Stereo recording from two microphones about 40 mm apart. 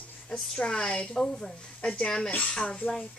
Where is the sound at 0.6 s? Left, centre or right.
Centre.